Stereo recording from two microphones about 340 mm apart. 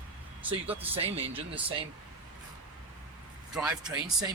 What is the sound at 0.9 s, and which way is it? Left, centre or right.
Speech, centre.